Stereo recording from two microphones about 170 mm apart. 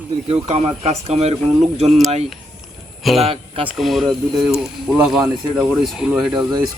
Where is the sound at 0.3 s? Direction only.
35° right (ahead or behind).